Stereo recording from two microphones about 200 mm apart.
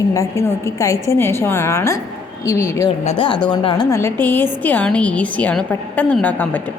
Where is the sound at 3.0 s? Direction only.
30° left (ahead or behind).